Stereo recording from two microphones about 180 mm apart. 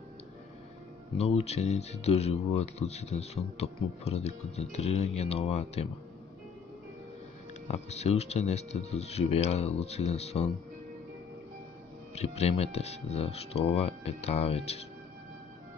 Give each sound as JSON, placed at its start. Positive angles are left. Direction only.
{"t": 1.1, "sound": "speech", "side_deg": 35}
{"t": 7.6, "sound": "speech", "side_deg": 35}
{"t": 12.2, "sound": "speech", "side_deg": 35}